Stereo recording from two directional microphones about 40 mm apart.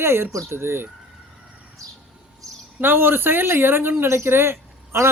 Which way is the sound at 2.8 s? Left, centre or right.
Right.